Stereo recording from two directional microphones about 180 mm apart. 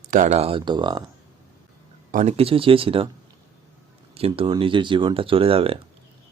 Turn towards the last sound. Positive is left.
turn(degrees=-30)  # may be behind; listen again after turning